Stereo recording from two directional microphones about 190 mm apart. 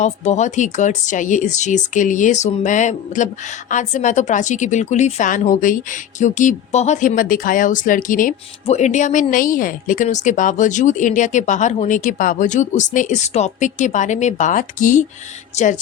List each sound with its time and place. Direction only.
0.0 s speech: 40° left (ahead or behind)